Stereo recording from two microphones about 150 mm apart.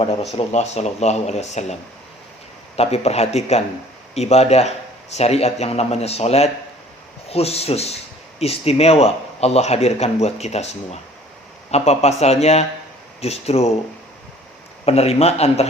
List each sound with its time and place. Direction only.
0.0 s speech: 35° left (ahead or behind)
0.3 s a man's voice: 45° left (ahead or behind)
2.7 s a man's voice: 45° left (ahead or behind)
14.8 s a man's voice: 45° left (ahead or behind)